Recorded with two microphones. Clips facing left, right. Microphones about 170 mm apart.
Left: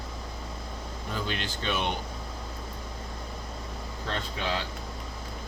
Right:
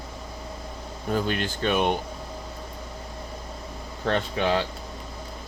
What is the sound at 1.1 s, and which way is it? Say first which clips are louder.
Speech: right 8 dB; 50° right (ahead or behind).